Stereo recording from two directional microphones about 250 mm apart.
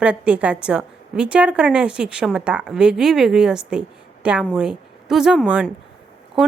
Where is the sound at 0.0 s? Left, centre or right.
Centre.